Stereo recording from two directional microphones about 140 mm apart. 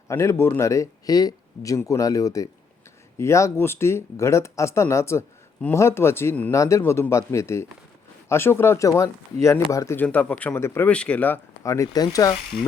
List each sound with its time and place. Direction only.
0.1 s speech: 20° left (ahead or behind)